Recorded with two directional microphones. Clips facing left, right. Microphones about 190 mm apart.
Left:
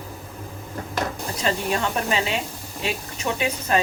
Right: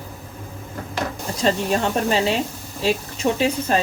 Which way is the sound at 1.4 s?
35° right (ahead or behind).